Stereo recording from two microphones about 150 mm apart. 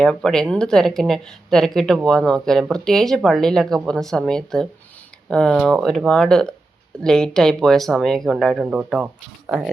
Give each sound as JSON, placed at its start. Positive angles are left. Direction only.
{"t": 0.0, "sound": "speech", "side_deg": 5}